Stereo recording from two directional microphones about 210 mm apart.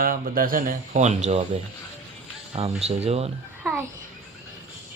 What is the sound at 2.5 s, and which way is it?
Speech, 30° right (ahead or behind).